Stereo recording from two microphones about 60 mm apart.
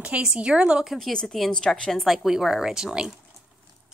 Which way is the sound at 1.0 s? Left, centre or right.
Centre.